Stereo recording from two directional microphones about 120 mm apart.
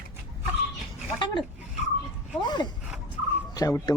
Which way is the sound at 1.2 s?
40° left (ahead or behind).